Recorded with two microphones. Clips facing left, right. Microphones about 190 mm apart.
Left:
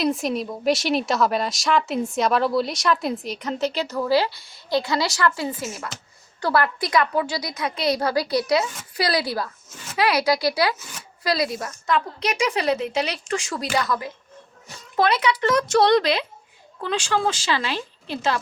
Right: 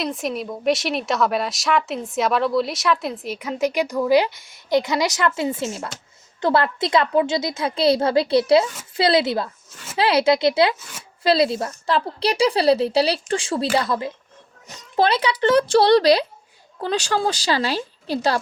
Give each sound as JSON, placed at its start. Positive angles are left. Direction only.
{"t": 0.0, "sound": "a woman's voice", "side_deg": 0}